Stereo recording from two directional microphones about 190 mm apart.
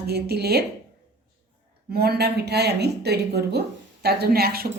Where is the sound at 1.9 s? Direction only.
55° right (ahead or behind).